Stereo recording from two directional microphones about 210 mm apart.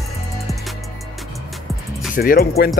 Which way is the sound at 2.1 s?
45° left (ahead or behind).